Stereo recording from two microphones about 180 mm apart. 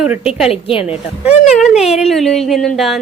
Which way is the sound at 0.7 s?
30° left (ahead or behind).